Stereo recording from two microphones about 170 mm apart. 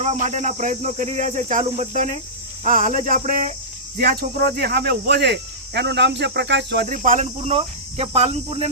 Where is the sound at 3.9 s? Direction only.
60° right (ahead or behind); by 6.8 s 90° right.